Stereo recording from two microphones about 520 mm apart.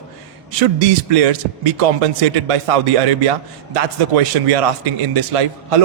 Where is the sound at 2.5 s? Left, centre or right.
Right.